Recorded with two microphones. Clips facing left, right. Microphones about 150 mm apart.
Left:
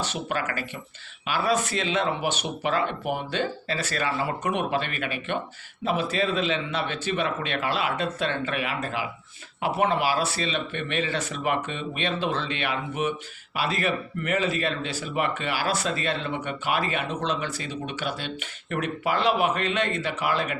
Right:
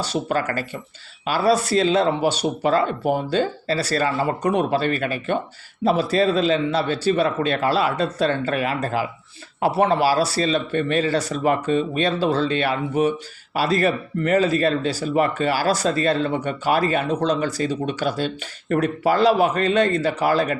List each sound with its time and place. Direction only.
0.0 s speech: 35° right (ahead or behind)